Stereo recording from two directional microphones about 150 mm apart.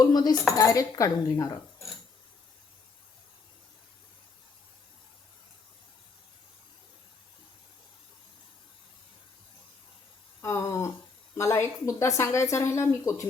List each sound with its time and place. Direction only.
0.0 s speech: 25° left (ahead or behind)
10.4 s speech: 20° left (ahead or behind)